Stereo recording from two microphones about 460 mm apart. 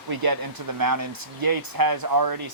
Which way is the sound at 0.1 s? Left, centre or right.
Right.